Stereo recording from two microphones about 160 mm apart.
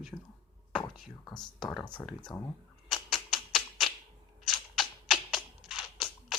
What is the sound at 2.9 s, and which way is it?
Typewriter, centre (ahead or behind).